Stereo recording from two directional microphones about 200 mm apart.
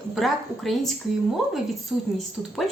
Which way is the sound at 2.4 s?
5° right (ahead or behind).